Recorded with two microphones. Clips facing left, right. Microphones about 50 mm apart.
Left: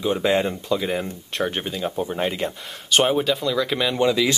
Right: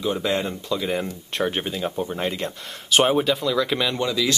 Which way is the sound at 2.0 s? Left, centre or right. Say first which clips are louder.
Left 2 dB; centre.